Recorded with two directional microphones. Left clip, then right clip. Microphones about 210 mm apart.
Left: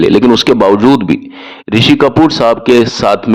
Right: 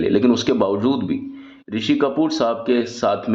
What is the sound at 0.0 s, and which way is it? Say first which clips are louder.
Speech: left 10 dB; 35° left (ahead or behind).